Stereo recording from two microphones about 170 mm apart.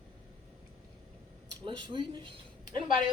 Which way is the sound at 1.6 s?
30° right (ahead or behind).